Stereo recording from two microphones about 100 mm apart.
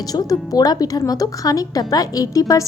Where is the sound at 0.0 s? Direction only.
40° left (ahead or behind).